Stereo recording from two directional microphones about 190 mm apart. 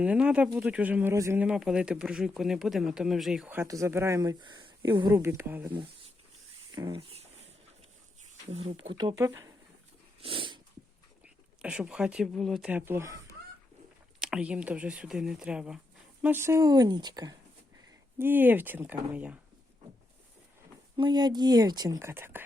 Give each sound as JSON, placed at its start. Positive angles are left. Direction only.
{"t": 0.0, "sound": "speech", "side_deg": -5}
{"t": 6.7, "sound": "a sound", "side_deg": -20}
{"t": 8.4, "sound": "a woman's voice", "side_deg": -30}
{"t": 10.2, "sound": "dog", "side_deg": -30}
{"t": 11.6, "sound": "speech", "side_deg": -5}
{"t": 14.2, "sound": "a woman's voice", "side_deg": -5}
{"t": 18.2, "sound": "speech", "side_deg": -10}
{"t": 20.9, "sound": "a woman's voice", "side_deg": -20}